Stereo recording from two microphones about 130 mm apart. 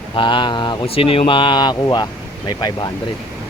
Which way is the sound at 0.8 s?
45° left (ahead or behind).